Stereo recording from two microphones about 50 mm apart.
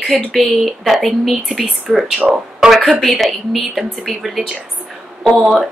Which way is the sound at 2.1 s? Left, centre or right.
Right.